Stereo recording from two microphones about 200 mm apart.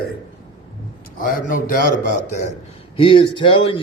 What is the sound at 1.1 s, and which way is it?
Speech, 45° left (ahead or behind).